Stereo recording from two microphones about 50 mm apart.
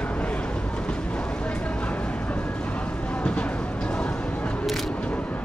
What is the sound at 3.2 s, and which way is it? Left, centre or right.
Music, left.